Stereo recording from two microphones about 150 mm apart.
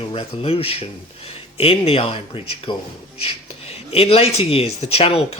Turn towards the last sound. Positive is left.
turn(degrees=40)  # may be behind; listen again after turning